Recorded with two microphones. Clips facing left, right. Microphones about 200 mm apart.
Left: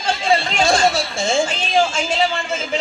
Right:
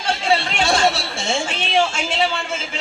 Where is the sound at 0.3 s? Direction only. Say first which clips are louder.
Left 2 dB; 70° right (ahead or behind).